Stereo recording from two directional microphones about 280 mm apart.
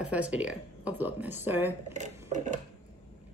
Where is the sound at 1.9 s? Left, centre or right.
Right.